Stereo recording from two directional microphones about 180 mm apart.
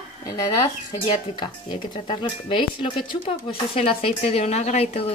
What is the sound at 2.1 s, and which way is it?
Speech, 30° left (ahead or behind).